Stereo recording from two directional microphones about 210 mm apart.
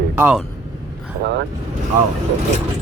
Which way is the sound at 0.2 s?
5° right (ahead or behind).